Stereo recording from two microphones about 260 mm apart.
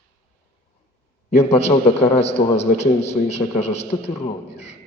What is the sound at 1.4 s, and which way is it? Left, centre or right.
A man's voice, left.